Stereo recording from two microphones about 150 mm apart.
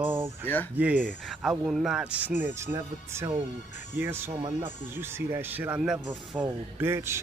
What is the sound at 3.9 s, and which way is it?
Speech, 15° right (ahead or behind).